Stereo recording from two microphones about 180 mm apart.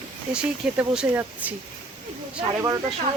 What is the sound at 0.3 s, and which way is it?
Speech, 5° right (ahead or behind).